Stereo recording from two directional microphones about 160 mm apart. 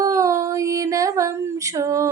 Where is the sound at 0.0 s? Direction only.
20° right (ahead or behind).